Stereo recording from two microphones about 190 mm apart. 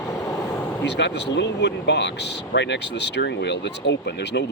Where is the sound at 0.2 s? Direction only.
15° left (ahead or behind).